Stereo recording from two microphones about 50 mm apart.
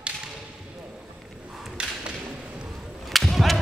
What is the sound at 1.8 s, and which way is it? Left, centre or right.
Thump, centre.